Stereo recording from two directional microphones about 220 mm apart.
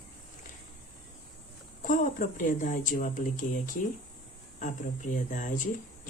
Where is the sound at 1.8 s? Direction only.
40° left (ahead or behind).